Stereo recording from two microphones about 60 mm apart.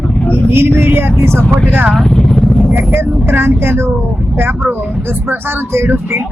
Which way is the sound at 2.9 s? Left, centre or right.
Right.